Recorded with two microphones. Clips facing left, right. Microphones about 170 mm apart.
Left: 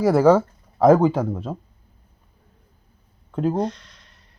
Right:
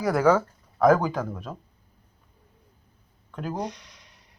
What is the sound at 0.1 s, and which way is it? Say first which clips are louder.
Speech: left 4 dB; 30° left (ahead or behind).